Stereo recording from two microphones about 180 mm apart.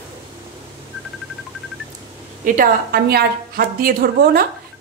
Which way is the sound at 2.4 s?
55° right (ahead or behind).